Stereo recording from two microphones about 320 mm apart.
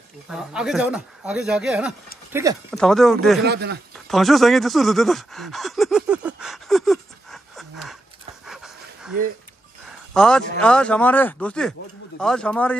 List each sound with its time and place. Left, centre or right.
0.3 s speech: centre
3.4 s speech: right
4.1 s a sound: centre
8.5 s pant: centre
9.8 s speech: centre